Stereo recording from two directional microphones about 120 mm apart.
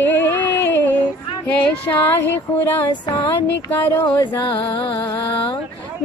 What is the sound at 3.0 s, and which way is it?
Speech, 40° left (ahead or behind).